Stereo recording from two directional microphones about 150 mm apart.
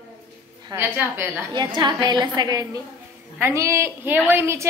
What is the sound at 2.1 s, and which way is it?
A woman's voice, 25° right (ahead or behind).